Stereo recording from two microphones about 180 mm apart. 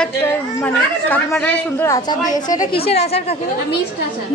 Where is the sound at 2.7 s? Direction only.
35° left (ahead or behind).